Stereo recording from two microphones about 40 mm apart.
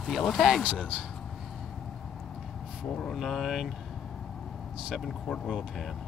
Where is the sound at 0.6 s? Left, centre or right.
Right.